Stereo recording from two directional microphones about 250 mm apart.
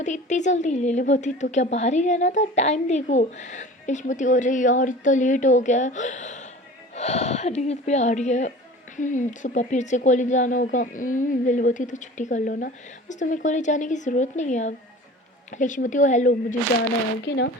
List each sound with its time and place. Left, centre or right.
0.0 s a woman's voice: left
17.2 s speech: left